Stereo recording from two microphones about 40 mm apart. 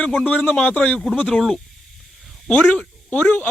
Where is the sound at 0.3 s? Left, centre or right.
Left.